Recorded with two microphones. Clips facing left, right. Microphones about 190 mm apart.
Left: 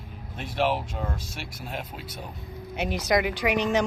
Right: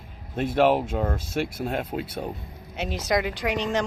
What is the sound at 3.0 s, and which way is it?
Speech, centre (ahead or behind).